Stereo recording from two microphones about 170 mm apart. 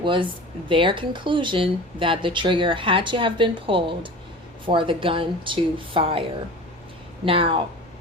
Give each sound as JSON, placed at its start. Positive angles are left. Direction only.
{"t": 0.0, "sound": "speech", "side_deg": -30}
{"t": 7.3, "sound": "speech", "side_deg": -30}